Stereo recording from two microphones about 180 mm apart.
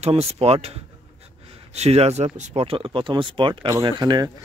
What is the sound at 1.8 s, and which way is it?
Speech, 35° right (ahead or behind).